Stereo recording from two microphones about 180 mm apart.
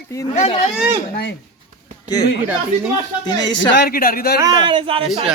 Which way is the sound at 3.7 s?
60° left (ahead or behind).